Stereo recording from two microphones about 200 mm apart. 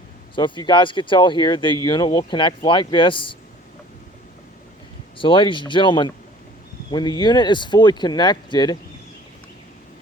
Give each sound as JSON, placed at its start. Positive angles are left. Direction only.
{"t": 0.3, "sound": "speech", "side_deg": 25}
{"t": 5.1, "sound": "speech", "side_deg": 25}